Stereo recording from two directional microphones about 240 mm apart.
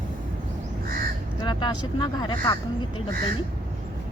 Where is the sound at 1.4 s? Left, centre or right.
Centre.